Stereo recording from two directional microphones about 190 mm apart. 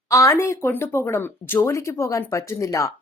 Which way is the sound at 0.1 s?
15° left (ahead or behind).